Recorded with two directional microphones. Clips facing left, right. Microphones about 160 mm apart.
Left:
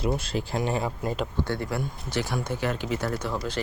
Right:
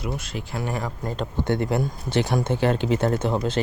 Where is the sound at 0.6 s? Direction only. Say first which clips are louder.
Left 1 dB; 20° left (ahead or behind).